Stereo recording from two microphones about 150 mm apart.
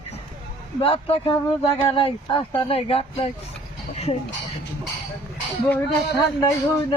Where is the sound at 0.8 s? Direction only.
35° left (ahead or behind).